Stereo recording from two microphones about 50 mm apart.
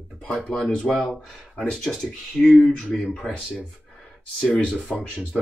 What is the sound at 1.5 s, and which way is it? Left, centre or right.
Speech, left.